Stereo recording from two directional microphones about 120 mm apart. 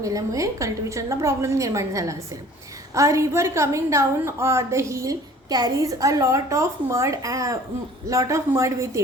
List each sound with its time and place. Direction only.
0.0 s a woman's voice: 30° right (ahead or behind)